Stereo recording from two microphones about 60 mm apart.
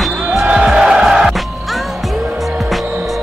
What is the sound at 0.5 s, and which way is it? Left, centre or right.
Music, centre.